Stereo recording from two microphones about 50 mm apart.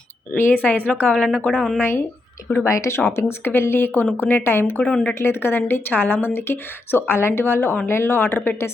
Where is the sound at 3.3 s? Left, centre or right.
Left.